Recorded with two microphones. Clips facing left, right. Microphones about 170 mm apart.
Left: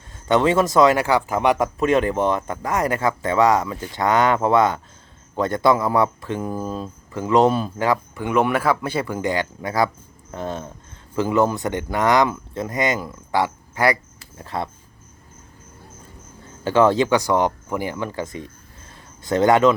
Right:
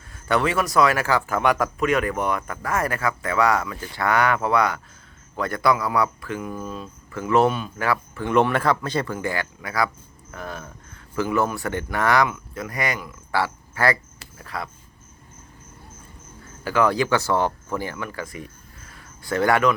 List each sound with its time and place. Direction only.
0.1 s speech: 20° left (ahead or behind)
7.1 s speech: 20° left (ahead or behind)
14.3 s speech: 25° left (ahead or behind)
16.6 s speech: 25° left (ahead or behind)